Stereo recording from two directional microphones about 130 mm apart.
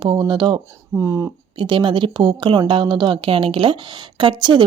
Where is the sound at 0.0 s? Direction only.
35° right (ahead or behind).